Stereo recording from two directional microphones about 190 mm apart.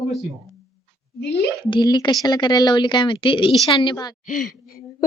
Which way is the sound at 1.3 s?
25° left (ahead or behind).